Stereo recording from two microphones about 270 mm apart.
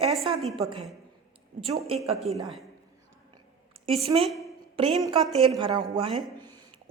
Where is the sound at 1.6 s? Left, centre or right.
Right.